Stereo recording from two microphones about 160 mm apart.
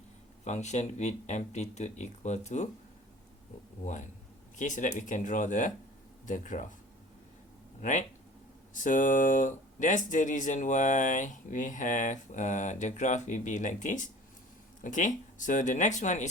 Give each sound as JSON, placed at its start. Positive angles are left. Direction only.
{"t": 0.4, "sound": "speech", "side_deg": 45}
{"t": 3.8, "sound": "speech", "side_deg": 50}
{"t": 7.8, "sound": "speech", "side_deg": 50}